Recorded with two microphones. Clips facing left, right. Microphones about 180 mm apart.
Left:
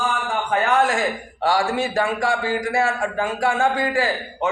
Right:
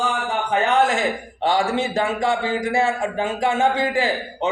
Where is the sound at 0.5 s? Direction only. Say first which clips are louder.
Right 1 dB; 20° right (ahead or behind).